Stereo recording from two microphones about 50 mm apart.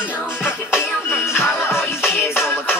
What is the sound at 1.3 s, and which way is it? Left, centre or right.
Music, left.